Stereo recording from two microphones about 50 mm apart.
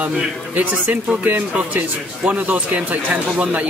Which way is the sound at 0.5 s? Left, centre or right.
Right.